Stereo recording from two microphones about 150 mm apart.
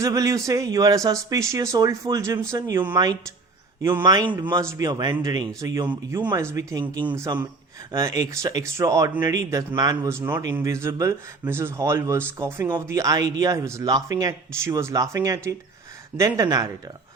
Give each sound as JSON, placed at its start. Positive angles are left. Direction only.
{"t": 0.0, "sound": "speech", "side_deg": -20}
{"t": 7.9, "sound": "speech", "side_deg": -20}